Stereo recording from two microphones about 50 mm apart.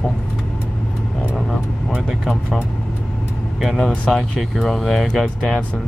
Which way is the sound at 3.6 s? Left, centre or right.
Centre.